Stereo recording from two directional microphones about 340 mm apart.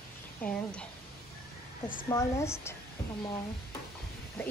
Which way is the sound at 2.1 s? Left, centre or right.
Centre.